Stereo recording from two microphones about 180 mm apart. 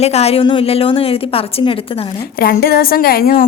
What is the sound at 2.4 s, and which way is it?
Speech, 55° left (ahead or behind).